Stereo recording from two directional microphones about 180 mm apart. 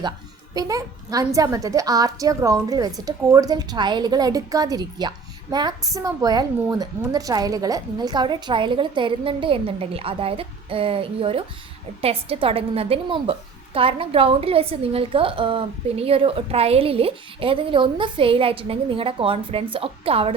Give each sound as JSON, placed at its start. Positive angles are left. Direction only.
{"t": 0.5, "sound": "a woman's voice", "side_deg": -20}